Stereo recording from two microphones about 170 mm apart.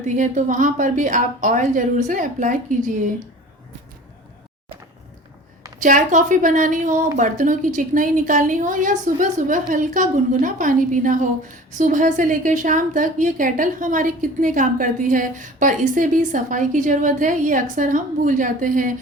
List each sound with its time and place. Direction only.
0.0 s a woman's voice: 45° right (ahead or behind)
5.8 s a woman's voice: 50° right (ahead or behind)